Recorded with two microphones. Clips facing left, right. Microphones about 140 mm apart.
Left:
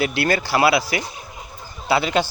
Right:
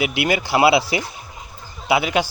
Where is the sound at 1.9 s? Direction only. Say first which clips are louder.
Even; 10° right (ahead or behind).